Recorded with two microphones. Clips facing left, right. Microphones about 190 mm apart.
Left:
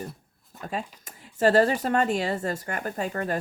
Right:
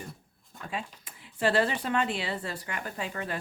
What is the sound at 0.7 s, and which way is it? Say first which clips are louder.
Speech: left 4 dB; 45° left (ahead or behind).